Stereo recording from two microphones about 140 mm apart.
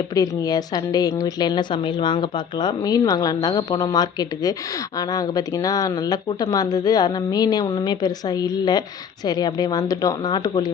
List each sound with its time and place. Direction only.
0.1 s a woman's voice: 25° left (ahead or behind)